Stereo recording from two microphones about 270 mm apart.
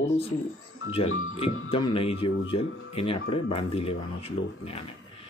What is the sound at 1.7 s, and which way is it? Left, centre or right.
Speech, centre.